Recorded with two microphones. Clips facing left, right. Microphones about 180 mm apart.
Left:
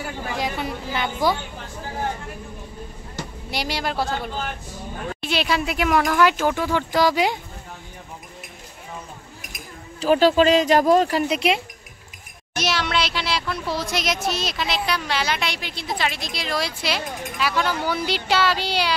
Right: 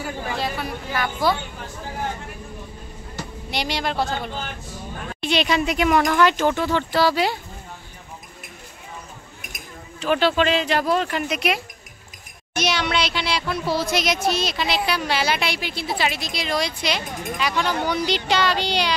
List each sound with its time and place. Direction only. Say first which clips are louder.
0.4 s a sound: left 1 dB; 20° left (ahead or behind)
3.4 s speech: right 1 dB; 5° left (ahead or behind)
9.9 s speech: left 4 dB; 35° left (ahead or behind)
12.5 s speech: right 1 dB; centre (ahead or behind)